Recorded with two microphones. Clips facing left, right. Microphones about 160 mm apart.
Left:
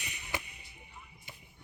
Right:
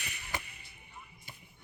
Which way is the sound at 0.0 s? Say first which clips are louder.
Left 1 dB; 20° left (ahead or behind).